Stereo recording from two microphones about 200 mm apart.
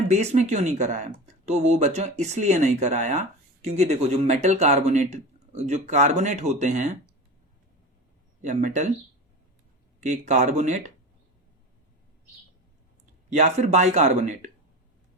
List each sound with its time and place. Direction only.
0.1 s speech: 35° right (ahead or behind)
8.4 s speech: 35° right (ahead or behind)
10.0 s speech: 35° right (ahead or behind)
13.3 s speech: 35° right (ahead or behind)